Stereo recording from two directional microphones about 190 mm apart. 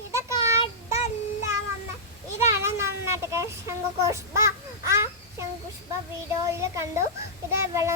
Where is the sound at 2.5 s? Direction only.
15° right (ahead or behind).